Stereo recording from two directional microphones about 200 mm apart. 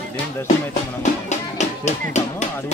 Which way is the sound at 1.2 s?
35° left (ahead or behind).